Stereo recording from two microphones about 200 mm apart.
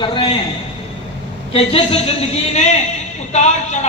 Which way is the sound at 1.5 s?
25° left (ahead or behind).